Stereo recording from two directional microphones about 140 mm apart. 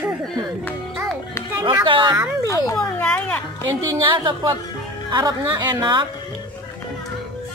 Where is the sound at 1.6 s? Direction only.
35° right (ahead or behind).